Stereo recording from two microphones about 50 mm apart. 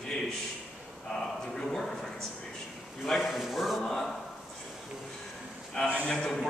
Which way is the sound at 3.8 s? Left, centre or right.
Centre.